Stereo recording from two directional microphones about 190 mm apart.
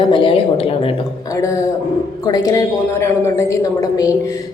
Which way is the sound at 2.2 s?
20° left (ahead or behind).